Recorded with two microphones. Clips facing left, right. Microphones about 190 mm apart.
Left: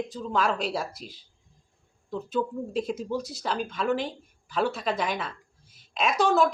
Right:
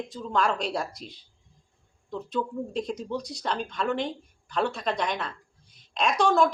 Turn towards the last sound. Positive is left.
turn(degrees=5)  # may be behind; listen again after turning